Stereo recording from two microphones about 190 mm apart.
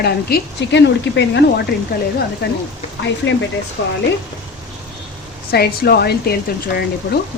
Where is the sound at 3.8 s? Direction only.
70° left (ahead or behind).